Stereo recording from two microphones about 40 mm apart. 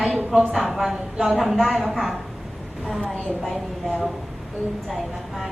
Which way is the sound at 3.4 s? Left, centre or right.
Centre.